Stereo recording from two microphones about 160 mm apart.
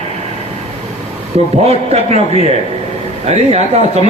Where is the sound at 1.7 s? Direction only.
40° right (ahead or behind).